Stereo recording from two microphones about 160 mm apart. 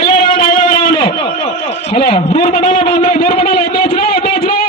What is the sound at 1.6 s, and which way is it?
Speech, 30° left (ahead or behind).